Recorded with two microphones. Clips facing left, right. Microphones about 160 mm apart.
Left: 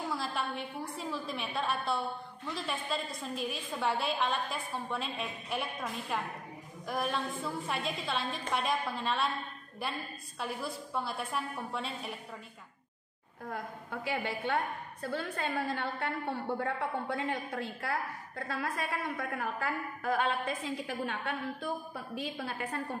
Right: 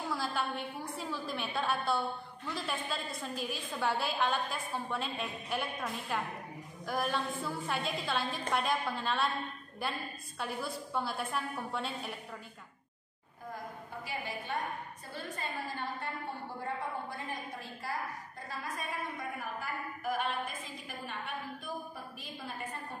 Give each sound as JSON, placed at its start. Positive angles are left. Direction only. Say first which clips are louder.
{"t": 0.1, "sound": "a woman's voice", "louder": "even", "side_deg": 0}
{"t": 10.4, "sound": "a woman's voice", "louder": "even", "side_deg": 0}
{"t": 14.1, "sound": "a woman's voice", "louder": "left 5 dB", "side_deg": 90}
{"t": 15.0, "sound": "a woman's voice", "louder": "left 7 dB", "side_deg": 70}